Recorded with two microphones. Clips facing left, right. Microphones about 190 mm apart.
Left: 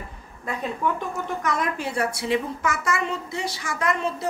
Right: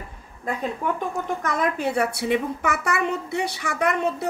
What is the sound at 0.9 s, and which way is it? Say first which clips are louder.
Speech: right 2 dB; 55° right (ahead or behind).